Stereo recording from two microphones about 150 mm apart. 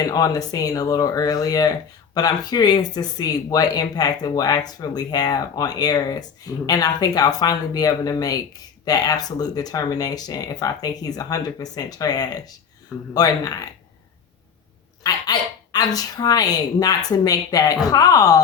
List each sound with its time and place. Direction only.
0.0 s speech: 25° left (ahead or behind)
15.0 s speech: 25° left (ahead or behind)